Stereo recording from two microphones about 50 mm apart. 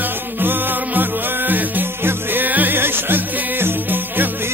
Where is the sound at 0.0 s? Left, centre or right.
Right.